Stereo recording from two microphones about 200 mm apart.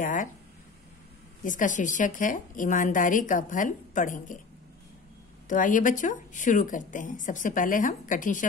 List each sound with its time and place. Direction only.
0.0 s speech: 40° left (ahead or behind)
1.4 s speech: 40° left (ahead or behind)
5.5 s speech: 40° left (ahead or behind)